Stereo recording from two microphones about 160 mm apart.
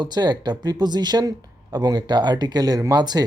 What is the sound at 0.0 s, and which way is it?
Speech, 25° right (ahead or behind).